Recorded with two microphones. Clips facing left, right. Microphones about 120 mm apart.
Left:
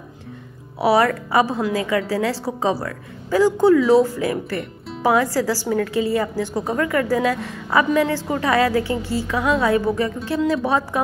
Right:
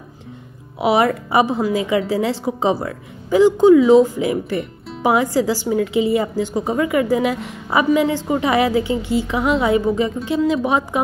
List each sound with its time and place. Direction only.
0.7 s a woman's voice: 20° right (ahead or behind)